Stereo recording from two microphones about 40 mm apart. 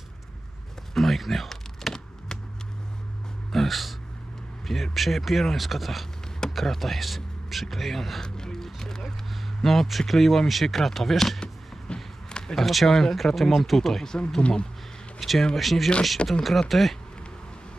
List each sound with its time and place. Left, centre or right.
0.9 s power windows: centre
3.5 s a sound: centre
4.6 s speech: centre
8.2 s music: centre
9.6 s speech: centre
11.9 s a sound: left
12.5 s speech: centre
14.3 s speech: left
15.2 s speech: centre